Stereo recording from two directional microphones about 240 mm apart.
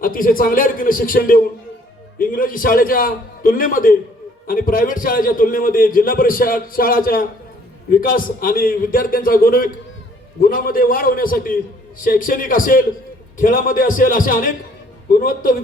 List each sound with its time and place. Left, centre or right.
0.0 s a man's voice: left